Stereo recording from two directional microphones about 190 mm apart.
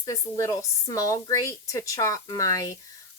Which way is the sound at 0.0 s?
20° left (ahead or behind).